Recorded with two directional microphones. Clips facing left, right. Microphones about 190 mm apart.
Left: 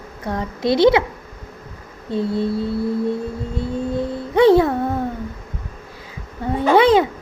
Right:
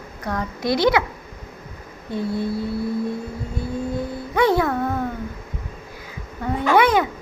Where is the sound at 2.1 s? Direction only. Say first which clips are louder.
Left 4 dB; 25° left (ahead or behind).